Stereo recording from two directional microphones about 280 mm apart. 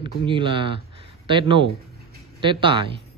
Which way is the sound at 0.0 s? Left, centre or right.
Centre.